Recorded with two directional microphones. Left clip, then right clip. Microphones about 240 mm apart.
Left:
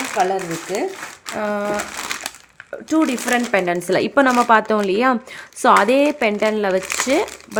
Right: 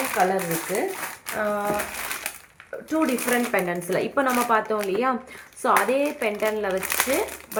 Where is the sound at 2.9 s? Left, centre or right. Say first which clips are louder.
Left 5 dB; left.